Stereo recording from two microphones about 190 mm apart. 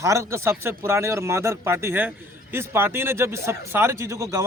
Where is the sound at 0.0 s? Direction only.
15° right (ahead or behind).